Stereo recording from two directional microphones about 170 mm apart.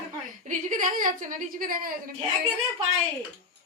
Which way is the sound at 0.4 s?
50° right (ahead or behind).